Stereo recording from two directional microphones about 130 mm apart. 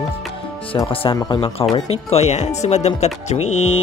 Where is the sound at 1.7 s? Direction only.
55° left (ahead or behind).